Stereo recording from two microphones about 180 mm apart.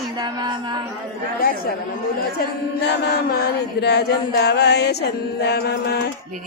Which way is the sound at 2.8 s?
65° left (ahead or behind).